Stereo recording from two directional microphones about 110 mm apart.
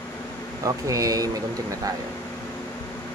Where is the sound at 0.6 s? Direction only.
30° right (ahead or behind).